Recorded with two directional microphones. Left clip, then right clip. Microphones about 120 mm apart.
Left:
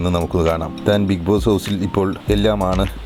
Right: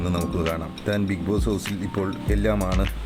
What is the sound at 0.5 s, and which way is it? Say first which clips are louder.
Speech: left 9 dB; 40° left (ahead or behind).